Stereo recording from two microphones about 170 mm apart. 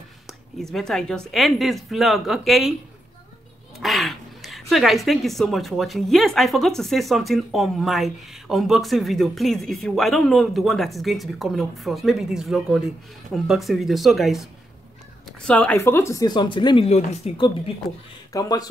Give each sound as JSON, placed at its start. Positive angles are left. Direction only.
{"t": 0.3, "sound": "speech", "side_deg": 0}
{"t": 3.8, "sound": "speech", "side_deg": 0}
{"t": 18.3, "sound": "speech", "side_deg": 20}